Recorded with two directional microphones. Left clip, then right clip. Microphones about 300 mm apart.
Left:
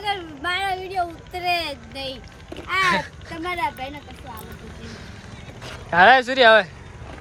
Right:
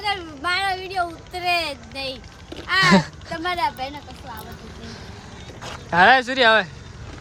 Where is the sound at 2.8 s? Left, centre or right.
Centre.